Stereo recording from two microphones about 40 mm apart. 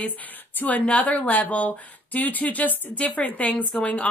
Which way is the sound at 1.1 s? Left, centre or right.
Left.